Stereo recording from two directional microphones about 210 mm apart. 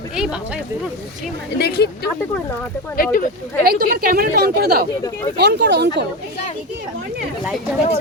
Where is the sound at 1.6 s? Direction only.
50° left (ahead or behind).